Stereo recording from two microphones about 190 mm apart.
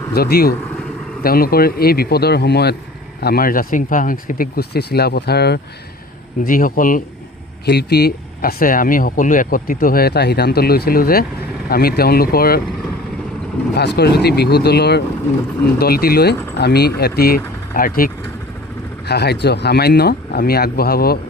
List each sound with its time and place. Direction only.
0.1 s speech: 55° left (ahead or behind)
6.4 s speech: 45° left (ahead or behind)
7.6 s speech: 60° left (ahead or behind)
13.7 s speech: 60° left (ahead or behind)
19.0 s speech: 60° left (ahead or behind)